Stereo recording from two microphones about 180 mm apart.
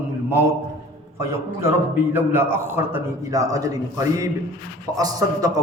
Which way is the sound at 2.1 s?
10° right (ahead or behind).